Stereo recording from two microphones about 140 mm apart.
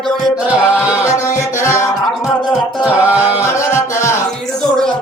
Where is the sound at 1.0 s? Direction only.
20° left (ahead or behind).